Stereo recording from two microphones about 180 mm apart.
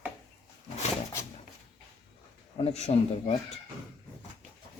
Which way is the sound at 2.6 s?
35° left (ahead or behind).